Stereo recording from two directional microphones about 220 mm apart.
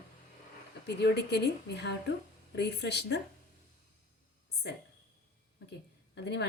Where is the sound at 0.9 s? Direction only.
50° left (ahead or behind).